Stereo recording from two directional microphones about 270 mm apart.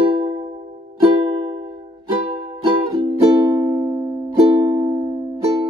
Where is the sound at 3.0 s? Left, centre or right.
Centre.